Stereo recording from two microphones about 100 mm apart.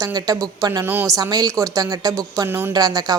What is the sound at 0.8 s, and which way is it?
Speech, 20° right (ahead or behind).